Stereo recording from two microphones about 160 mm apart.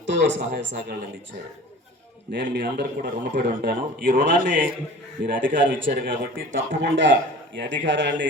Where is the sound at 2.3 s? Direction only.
90° right.